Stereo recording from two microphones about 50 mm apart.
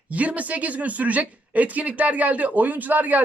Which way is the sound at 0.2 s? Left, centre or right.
Right.